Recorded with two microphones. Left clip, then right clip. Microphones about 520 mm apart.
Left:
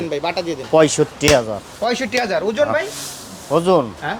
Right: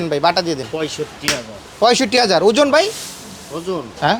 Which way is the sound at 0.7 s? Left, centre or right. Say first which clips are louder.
Left 10 dB; left.